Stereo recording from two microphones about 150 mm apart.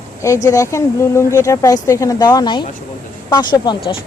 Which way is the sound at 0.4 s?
20° left (ahead or behind).